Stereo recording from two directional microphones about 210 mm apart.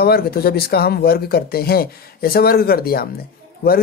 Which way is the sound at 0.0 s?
45° left (ahead or behind).